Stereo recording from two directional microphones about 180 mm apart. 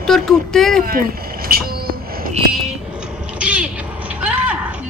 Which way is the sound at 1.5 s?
55° right (ahead or behind).